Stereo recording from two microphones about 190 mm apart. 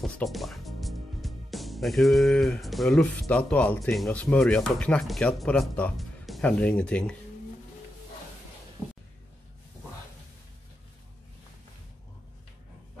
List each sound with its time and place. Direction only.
0.0 s speech: centre (ahead or behind)